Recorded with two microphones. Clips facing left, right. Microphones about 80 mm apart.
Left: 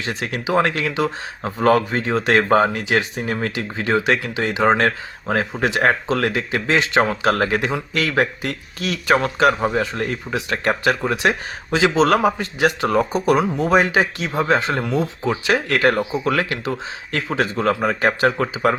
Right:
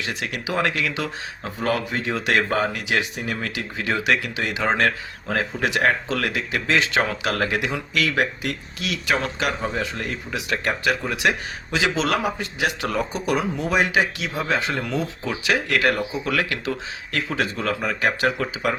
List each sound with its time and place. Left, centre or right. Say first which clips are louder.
0.0 s speech: left 4 dB; left
1.6 s speech: left 7 dB; left